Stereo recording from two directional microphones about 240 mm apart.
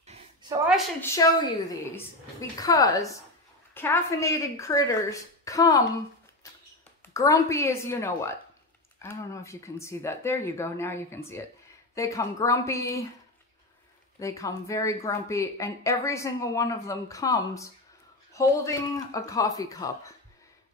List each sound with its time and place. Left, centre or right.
0.0 s a sound: right
1.0 s a woman's voice: centre
2.5 s a woman's voice: centre
7.2 s a woman's voice: centre
14.2 s a woman's voice: centre